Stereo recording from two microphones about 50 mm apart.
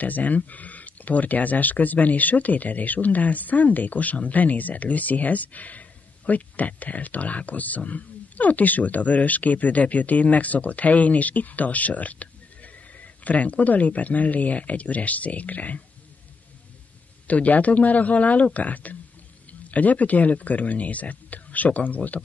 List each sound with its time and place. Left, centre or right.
0.0 s speech: left
17.3 s speech: left